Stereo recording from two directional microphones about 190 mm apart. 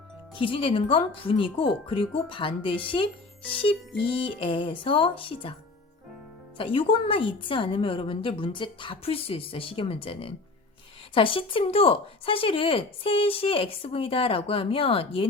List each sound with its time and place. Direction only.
0.3 s speech: 30° left (ahead or behind)
6.6 s speech: 30° left (ahead or behind)